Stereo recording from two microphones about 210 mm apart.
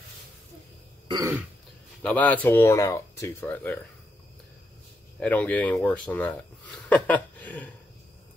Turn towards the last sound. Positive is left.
turn(degrees=5)  # may be behind; listen again after turning